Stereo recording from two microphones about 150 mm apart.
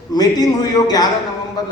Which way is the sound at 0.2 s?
25° left (ahead or behind).